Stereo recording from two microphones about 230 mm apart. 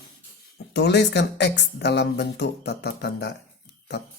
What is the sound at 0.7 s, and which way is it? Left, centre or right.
Speech, left.